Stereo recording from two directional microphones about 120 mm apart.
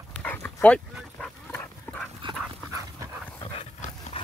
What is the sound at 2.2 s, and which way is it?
Dog, 45° right (ahead or behind).